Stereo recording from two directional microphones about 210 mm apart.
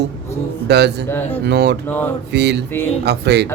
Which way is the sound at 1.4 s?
50° right (ahead or behind).